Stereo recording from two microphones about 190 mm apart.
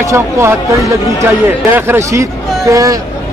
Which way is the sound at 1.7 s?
10° right (ahead or behind).